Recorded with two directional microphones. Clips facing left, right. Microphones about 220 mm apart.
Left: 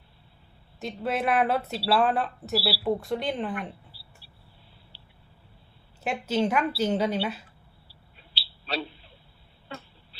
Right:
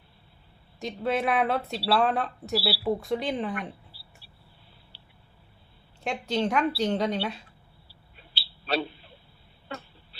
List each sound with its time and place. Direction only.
0.8 s speech: centre (ahead or behind)
6.0 s speech: 5° left (ahead or behind)
8.4 s a sound: 55° right (ahead or behind)